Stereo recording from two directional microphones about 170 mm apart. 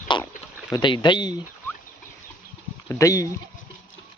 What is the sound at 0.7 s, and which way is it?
Speech, 25° left (ahead or behind).